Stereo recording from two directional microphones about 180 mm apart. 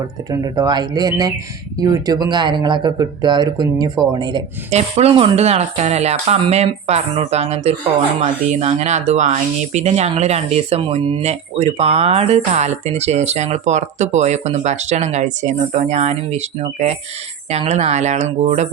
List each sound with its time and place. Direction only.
0.3 s speech: 20° right (ahead or behind)
4.7 s speech: 35° right (ahead or behind)